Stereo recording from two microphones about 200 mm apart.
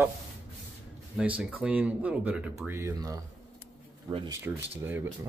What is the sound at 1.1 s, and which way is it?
Speech, 5° right (ahead or behind).